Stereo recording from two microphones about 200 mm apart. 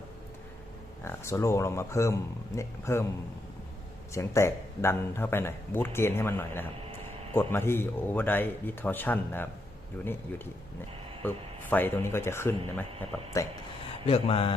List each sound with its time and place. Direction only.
1.0 s speech: 15° left (ahead or behind)
4.1 s speech: 15° left (ahead or behind)
14.1 s mantra: 30° left (ahead or behind)